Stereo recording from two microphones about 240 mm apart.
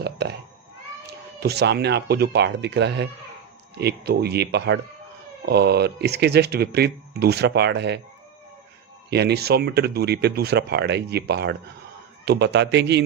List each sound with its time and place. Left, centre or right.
0.0 s a sound: right
1.0 s speech: right
9.0 s speech: right